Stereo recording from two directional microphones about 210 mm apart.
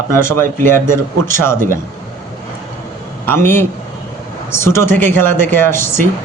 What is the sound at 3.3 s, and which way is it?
Speech, 10° left (ahead or behind).